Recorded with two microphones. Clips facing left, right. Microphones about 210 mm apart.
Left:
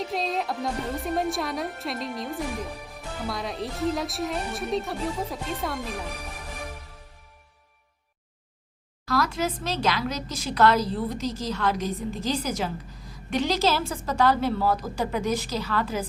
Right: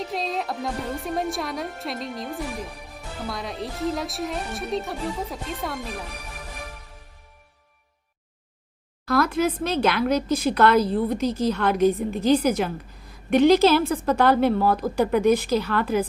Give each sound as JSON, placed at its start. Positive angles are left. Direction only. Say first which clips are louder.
{"t": 0.0, "sound": "a woman's voice", "louder": "even", "side_deg": 0}
{"t": 9.0, "sound": "speech", "louder": "right 5 dB", "side_deg": -55}